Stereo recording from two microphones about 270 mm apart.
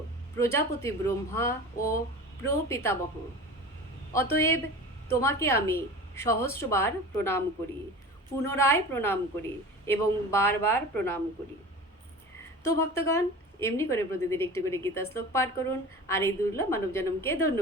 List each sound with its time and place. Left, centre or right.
0.3 s speech: centre
4.1 s speech: centre
8.4 s speech: centre
12.6 s speech: centre